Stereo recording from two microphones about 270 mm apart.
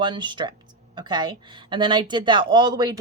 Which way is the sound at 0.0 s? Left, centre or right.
Centre.